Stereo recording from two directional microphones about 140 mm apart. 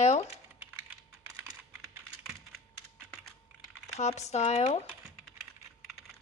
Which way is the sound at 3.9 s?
50° left (ahead or behind).